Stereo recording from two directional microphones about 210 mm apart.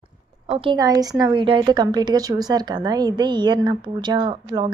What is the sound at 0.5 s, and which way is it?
A woman's voice, 25° right (ahead or behind).